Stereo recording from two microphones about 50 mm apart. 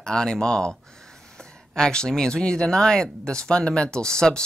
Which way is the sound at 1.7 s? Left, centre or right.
Centre.